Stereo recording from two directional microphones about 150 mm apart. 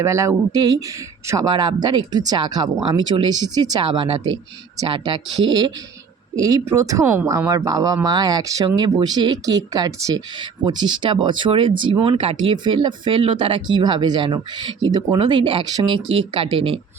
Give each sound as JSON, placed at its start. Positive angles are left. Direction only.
{"t": 0.0, "sound": "speech", "side_deg": -20}